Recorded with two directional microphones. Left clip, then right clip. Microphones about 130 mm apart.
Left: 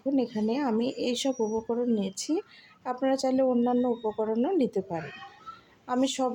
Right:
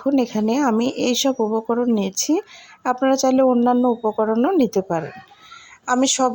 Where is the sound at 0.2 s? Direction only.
45° right (ahead or behind).